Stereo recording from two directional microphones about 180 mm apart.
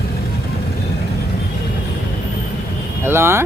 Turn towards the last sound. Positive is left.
turn(degrees=-15)  # may be behind; listen again after turning